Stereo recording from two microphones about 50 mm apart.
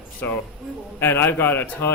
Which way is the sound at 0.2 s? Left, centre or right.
Left.